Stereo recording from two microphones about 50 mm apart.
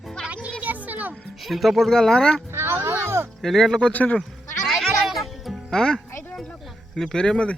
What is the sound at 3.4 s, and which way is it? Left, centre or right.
Speech, centre.